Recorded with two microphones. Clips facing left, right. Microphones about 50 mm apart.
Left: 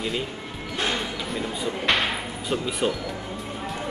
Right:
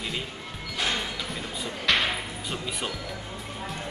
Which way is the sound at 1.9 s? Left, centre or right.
Left.